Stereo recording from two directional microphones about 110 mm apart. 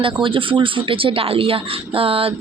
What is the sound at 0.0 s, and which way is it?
Speech, 50° right (ahead or behind).